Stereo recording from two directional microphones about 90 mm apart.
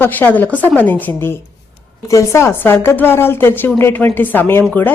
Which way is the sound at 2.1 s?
35° left (ahead or behind).